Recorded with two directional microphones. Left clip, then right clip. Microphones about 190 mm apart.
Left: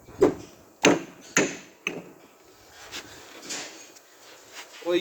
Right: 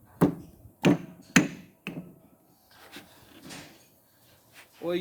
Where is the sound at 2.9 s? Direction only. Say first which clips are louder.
Left 9 dB; 25° right (ahead or behind).